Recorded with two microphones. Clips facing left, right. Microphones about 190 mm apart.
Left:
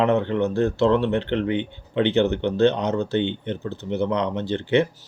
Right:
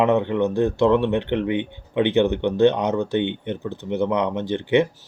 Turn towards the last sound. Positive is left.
turn(degrees=-15)  # may be behind; listen again after turning